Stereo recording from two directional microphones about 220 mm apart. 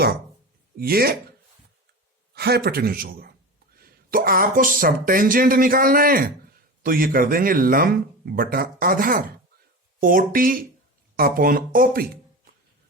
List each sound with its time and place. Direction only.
0.8 s a man's voice: 45° right (ahead or behind)
2.3 s a man's voice: 45° right (ahead or behind)